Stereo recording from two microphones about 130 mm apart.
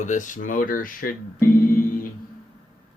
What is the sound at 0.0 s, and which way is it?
Speech, 75° left (ahead or behind).